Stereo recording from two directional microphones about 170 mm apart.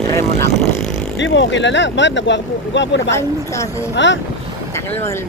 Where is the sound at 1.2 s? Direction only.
90° left.